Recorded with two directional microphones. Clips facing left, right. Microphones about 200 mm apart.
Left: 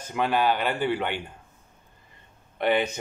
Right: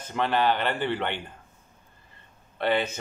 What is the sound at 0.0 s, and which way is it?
Speech, 10° left (ahead or behind).